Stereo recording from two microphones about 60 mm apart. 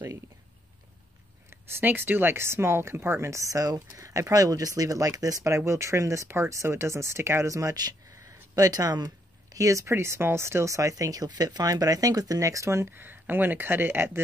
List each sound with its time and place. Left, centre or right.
1.7 s speech: right
3.9 s speech: right
5.7 s speech: right
6.2 s speech: right
6.5 s speech: right
7.4 s speech: right
12.9 s speech: right